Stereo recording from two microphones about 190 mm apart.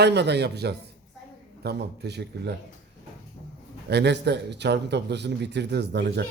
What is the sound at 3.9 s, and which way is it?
A man's voice, 60° right (ahead or behind).